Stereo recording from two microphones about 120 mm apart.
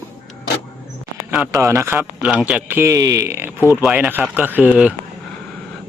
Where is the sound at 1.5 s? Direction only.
25° right (ahead or behind).